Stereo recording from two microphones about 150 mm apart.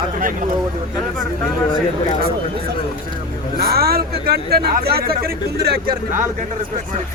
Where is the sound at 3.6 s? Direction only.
90° right.